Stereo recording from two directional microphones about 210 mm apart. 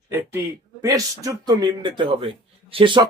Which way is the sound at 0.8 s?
15° right (ahead or behind).